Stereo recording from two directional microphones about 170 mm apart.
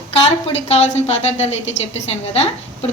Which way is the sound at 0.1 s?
35° left (ahead or behind).